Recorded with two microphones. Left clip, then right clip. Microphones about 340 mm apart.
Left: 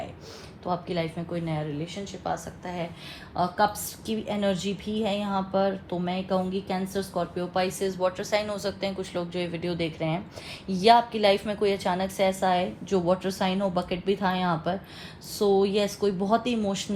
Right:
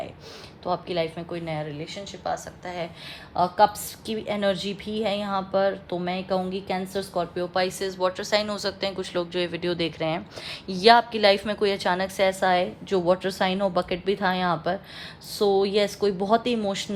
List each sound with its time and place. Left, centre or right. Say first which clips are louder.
0.6 s speech: right 3 dB; right